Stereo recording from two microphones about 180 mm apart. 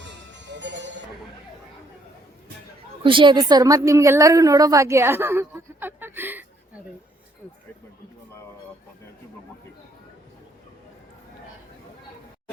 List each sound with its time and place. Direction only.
0.0 s music: 80° right
3.0 s a woman's voice: 30° right (ahead or behind); by 6.4 s 10° right (ahead or behind)